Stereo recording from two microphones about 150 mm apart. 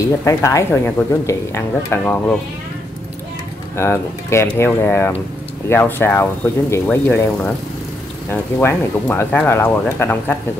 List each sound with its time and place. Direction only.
0.2 s speech: 20° left (ahead or behind)
3.7 s speech: 15° left (ahead or behind)